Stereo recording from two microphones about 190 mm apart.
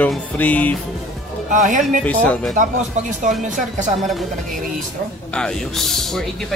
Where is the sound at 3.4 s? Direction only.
40° right (ahead or behind).